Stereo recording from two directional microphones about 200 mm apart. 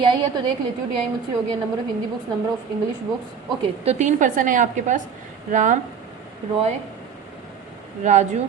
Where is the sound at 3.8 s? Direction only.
35° right (ahead or behind).